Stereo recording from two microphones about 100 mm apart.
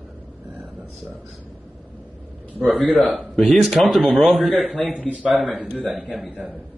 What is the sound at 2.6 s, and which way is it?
Speech, centre (ahead or behind).